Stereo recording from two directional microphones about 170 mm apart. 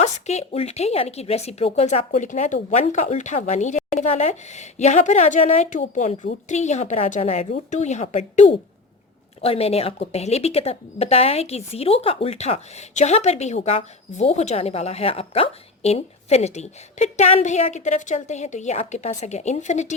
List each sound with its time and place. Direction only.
0.0 s a woman's voice: 40° left (ahead or behind)